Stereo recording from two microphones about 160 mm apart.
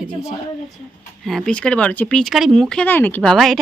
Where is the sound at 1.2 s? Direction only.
Centre (ahead or behind).